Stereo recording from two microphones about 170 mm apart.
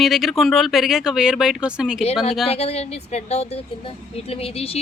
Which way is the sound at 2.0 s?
35° left (ahead or behind).